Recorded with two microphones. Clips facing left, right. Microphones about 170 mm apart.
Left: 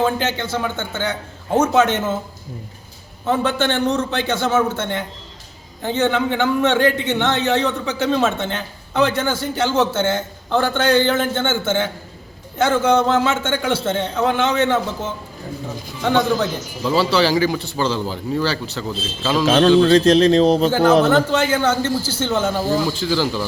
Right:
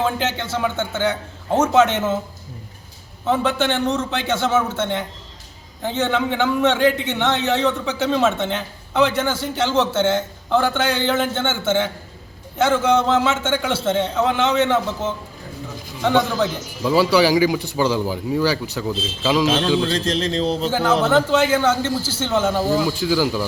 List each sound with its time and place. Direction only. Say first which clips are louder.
0.0 s a man's voice: left 2 dB; centre (ahead or behind)
3.2 s a man's voice: even; 5° right (ahead or behind)
16.0 s a man's voice: left 1 dB; 5° right (ahead or behind)
19.5 s a man's voice: left 7 dB; 70° left (ahead or behind)
21.1 s a man's voice: even; 5° right (ahead or behind)